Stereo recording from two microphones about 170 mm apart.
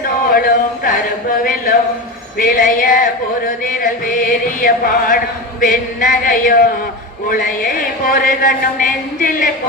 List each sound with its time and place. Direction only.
0.3 s a sound: 60° left (ahead or behind)
1.5 s speech: 55° left (ahead or behind)
2.4 s male singing: 55° left (ahead or behind)
7.3 s speech: 55° left (ahead or behind)